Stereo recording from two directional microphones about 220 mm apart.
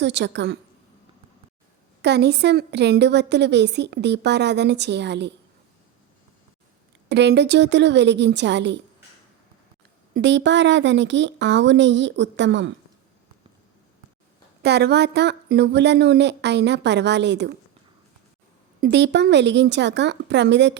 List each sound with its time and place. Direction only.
0.0 s a woman's voice: 50° right (ahead or behind)
2.0 s a woman's voice: 50° right (ahead or behind)
7.1 s a woman's voice: 50° right (ahead or behind)
10.2 s a woman's voice: 55° right (ahead or behind)
14.6 s a woman's voice: 50° right (ahead or behind)
18.8 s a woman's voice: 50° right (ahead or behind)